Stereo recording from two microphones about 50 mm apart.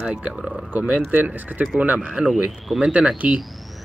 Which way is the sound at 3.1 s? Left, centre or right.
Right.